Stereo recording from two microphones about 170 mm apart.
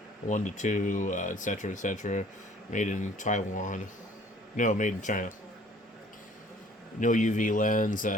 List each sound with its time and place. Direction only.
0.3 s speech: 45° left (ahead or behind)
7.0 s speech: 50° left (ahead or behind)